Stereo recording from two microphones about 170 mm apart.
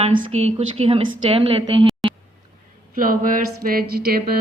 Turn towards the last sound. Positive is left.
turn(degrees=-65)  # may be behind; listen again after turning